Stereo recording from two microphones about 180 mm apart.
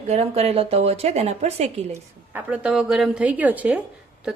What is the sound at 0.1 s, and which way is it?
A woman's voice, 35° right (ahead or behind).